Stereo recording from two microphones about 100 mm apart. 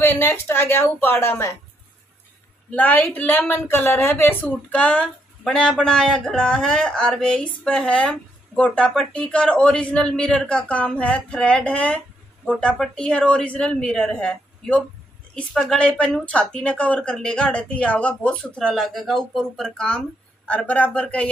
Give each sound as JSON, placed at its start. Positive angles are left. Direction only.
{"t": 0.0, "sound": "a woman's voice", "side_deg": 20}
{"t": 2.7, "sound": "a woman's voice", "side_deg": 15}